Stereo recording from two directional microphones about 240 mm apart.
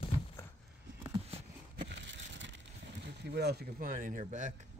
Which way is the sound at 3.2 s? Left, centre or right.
Right.